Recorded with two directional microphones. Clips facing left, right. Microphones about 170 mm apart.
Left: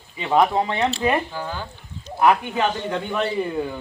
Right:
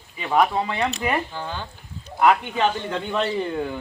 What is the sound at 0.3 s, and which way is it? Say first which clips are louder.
Speech: left 2 dB; 25° left (ahead or behind).